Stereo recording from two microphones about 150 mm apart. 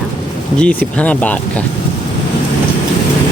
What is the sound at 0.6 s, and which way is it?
Speech, 10° left (ahead or behind).